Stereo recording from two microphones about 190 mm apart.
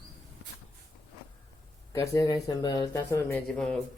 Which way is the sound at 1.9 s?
20° left (ahead or behind).